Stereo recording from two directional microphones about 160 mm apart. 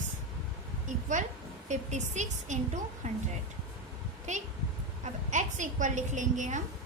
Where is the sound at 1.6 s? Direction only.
50° right (ahead or behind).